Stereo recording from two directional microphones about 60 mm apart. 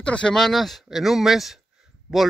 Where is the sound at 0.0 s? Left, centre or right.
Centre.